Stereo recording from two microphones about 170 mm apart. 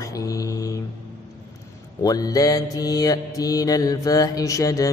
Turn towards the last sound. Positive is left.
turn(degrees=20)  # may be behind; listen again after turning